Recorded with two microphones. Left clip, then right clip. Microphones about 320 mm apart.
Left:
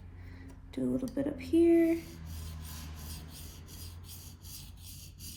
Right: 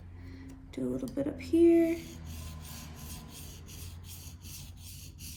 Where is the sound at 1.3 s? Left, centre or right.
Centre.